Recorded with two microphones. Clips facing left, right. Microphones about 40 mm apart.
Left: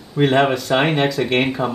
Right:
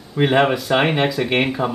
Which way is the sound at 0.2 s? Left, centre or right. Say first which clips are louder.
Even; centre.